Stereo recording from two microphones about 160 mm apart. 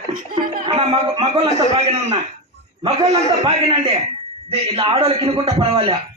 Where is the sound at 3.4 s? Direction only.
40° right (ahead or behind).